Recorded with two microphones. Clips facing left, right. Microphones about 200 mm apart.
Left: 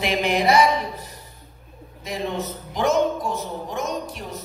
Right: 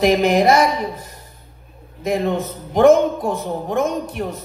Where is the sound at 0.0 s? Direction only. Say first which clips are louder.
Right 7 dB; 40° right (ahead or behind).